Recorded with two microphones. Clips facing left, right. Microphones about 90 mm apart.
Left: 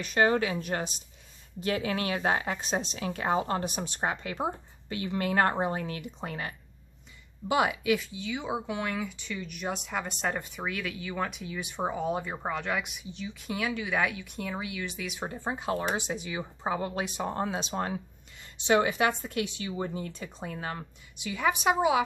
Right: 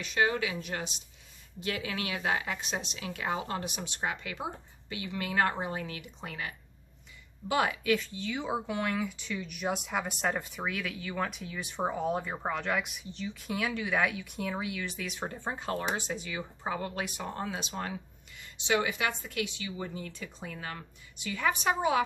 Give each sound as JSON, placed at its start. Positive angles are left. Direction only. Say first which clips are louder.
{"t": 0.0, "sound": "speech", "louder": "left 4 dB", "side_deg": 45}
{"t": 7.4, "sound": "speech", "louder": "left 2 dB", "side_deg": 15}